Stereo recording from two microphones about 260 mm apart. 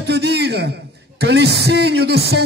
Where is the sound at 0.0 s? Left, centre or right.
Right.